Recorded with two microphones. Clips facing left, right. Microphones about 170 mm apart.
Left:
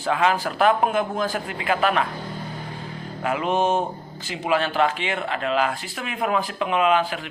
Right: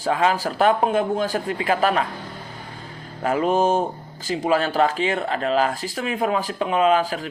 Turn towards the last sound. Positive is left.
turn(degrees=-35)  # may be behind; listen again after turning